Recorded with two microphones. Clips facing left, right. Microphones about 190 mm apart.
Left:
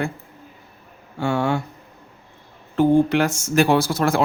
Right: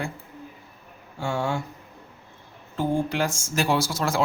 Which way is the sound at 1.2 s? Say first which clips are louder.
Left 6 dB; 65° left (ahead or behind).